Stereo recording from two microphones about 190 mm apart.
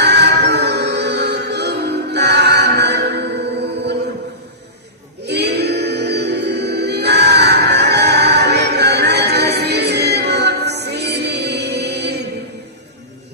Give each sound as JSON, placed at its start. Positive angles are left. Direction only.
{"t": 0.0, "sound": "music", "side_deg": -60}
{"t": 5.2, "sound": "music", "side_deg": -60}